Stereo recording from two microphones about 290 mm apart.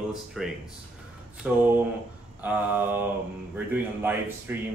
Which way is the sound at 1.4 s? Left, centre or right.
Centre.